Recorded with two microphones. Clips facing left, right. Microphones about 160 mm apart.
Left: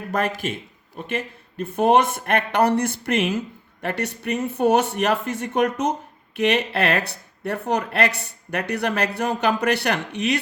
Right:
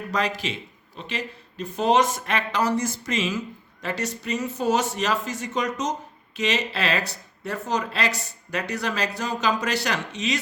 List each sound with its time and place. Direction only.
0.1 s a man's voice: 55° left (ahead or behind)